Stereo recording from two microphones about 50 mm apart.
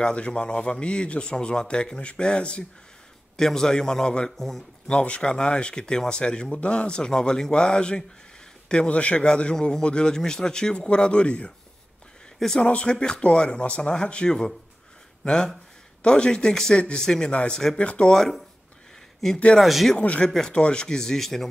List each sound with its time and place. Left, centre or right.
0.0 s a man's voice: left
3.3 s speech: centre
4.4 s speech: centre
4.8 s a man's voice: left
12.4 s a man's voice: centre
18.1 s speech: centre
20.0 s a man's voice: left
20.2 s speech: centre